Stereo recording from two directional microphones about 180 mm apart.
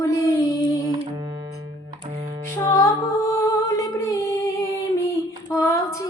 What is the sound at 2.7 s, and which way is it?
Music, 15° left (ahead or behind).